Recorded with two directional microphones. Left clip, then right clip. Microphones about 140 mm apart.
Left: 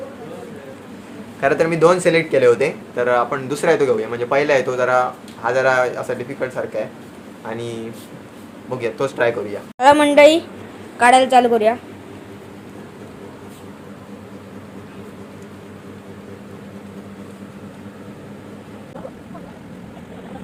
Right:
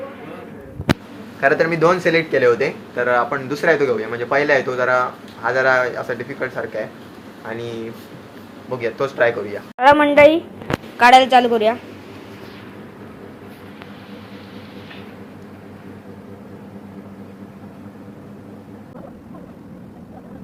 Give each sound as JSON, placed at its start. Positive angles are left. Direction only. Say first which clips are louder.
{"t": 1.4, "sound": "speech", "louder": "even", "side_deg": 10}
{"t": 2.0, "sound": "a woman's voice", "louder": "left 1 dB", "side_deg": 20}
{"t": 10.9, "sound": "a woman's voice", "louder": "right 1 dB", "side_deg": -10}